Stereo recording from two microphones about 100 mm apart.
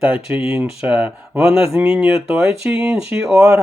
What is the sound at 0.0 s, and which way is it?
Speech, 15° right (ahead or behind).